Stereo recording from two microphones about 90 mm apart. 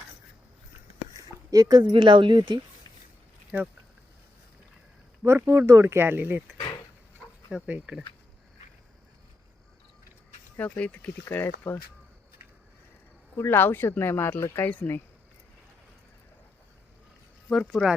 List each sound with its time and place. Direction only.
1.1 s a sound: 40° right (ahead or behind)
1.9 s speech: 65° right (ahead or behind)
3.5 s speech: 20° right (ahead or behind)
5.2 s speech: 30° right (ahead or behind)
7.5 s speech: 10° right (ahead or behind)
10.6 s speech: 15° left (ahead or behind)
13.3 s speech: 25° left (ahead or behind)
17.7 s speech: centre (ahead or behind)